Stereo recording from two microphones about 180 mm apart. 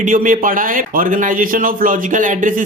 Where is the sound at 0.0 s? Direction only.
45° right (ahead or behind).